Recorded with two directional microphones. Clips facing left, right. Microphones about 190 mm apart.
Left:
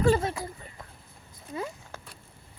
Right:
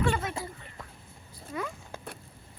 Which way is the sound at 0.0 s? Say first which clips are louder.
Left 6 dB; 35° left (ahead or behind).